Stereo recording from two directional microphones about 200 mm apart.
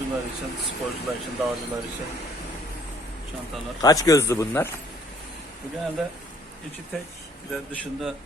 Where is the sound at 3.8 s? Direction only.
20° left (ahead or behind).